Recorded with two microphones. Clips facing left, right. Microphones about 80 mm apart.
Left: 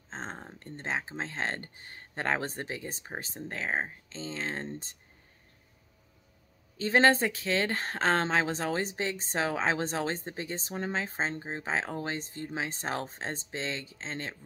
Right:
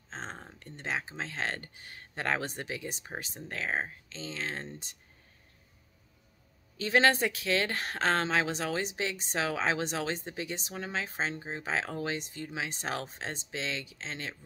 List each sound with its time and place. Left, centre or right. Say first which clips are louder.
0.1 s speech: left 2 dB; left
6.8 s speech: left 2 dB; left